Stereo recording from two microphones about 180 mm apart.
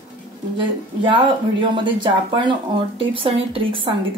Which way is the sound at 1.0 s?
25° right (ahead or behind).